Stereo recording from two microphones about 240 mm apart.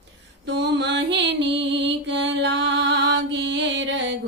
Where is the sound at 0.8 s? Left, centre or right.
Right.